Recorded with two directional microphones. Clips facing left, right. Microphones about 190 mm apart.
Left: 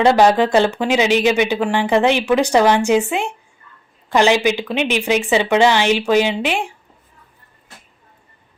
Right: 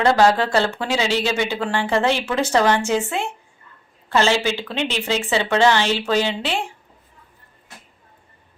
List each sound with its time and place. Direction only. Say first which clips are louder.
0.0 s speech: left 3 dB; 20° left (ahead or behind)